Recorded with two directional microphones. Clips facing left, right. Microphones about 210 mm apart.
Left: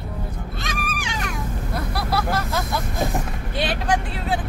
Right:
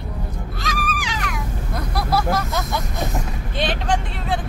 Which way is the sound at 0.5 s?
25° left (ahead or behind).